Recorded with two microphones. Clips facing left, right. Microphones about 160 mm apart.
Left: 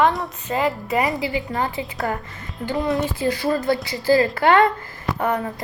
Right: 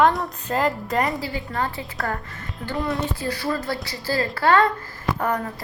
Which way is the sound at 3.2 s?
20° left (ahead or behind).